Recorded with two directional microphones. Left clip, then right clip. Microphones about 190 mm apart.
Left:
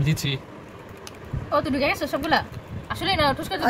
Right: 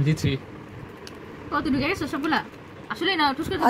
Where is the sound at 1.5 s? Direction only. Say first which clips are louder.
Left 3 dB; 55° left (ahead or behind).